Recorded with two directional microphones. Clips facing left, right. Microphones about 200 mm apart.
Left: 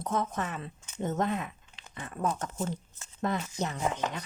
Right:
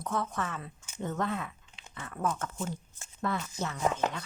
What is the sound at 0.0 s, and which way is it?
A woman's voice, 20° left (ahead or behind).